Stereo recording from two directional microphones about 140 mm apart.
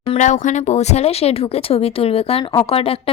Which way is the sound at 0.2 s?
60° left (ahead or behind).